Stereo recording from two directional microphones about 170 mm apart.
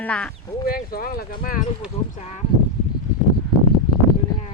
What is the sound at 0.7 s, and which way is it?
Speech, 60° left (ahead or behind).